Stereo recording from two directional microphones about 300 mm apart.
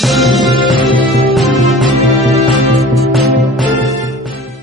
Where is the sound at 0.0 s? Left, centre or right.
Centre.